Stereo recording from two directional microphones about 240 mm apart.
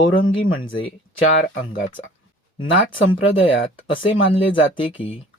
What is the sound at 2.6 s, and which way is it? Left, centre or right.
Speech, left.